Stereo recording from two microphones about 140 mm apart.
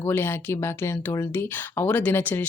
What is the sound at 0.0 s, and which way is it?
Speech, 15° left (ahead or behind).